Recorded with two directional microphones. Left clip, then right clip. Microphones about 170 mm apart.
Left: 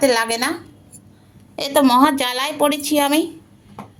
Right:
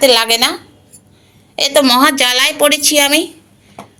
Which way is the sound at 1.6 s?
15° left (ahead or behind).